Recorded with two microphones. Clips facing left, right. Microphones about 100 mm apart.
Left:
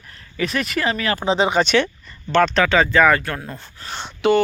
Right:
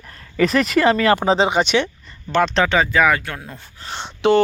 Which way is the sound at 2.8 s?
5° right (ahead or behind).